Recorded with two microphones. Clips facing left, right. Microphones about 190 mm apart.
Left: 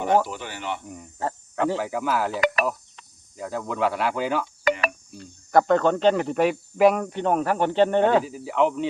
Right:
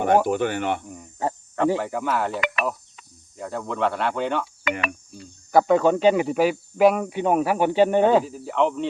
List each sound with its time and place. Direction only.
0.3 s speech: 55° right (ahead or behind)
1.5 s speech: centre (ahead or behind)
4.7 s cricket: 40° left (ahead or behind)
5.1 s speech: centre (ahead or behind)